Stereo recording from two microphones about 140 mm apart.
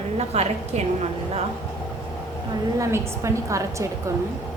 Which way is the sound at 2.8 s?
20° right (ahead or behind).